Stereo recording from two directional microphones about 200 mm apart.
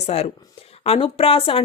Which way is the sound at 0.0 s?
30° left (ahead or behind).